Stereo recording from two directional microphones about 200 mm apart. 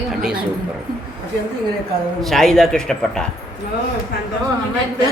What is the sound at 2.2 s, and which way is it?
Speech, centre (ahead or behind).